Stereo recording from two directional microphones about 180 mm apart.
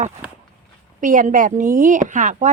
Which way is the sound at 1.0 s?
45° right (ahead or behind).